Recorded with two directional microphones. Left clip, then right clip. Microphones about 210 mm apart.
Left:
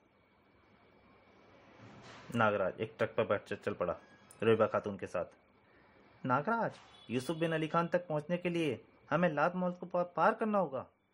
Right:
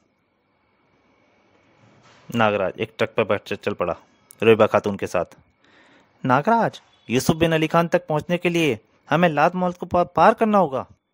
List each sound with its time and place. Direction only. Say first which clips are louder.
2.3 s speech: right 11 dB; 50° right (ahead or behind)